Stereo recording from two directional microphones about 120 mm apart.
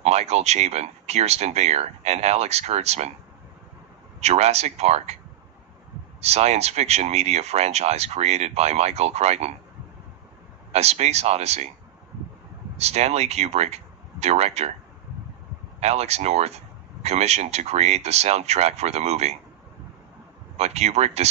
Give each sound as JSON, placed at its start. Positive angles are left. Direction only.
{"t": 0.0, "sound": "speech", "side_deg": -65}
{"t": 4.2, "sound": "speech", "side_deg": -65}
{"t": 6.2, "sound": "speech", "side_deg": -65}
{"t": 10.7, "sound": "speech", "side_deg": -65}
{"t": 12.7, "sound": "speech", "side_deg": -65}
{"t": 15.8, "sound": "speech", "side_deg": -65}
{"t": 20.5, "sound": "speech", "side_deg": -65}